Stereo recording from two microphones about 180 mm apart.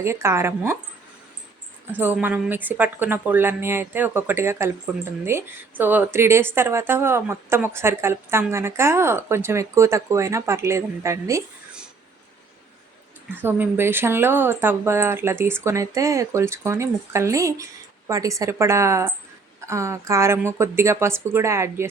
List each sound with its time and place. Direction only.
0.0 s speech: 15° right (ahead or behind)
1.9 s speech: 10° right (ahead or behind)
13.3 s speech: 10° right (ahead or behind)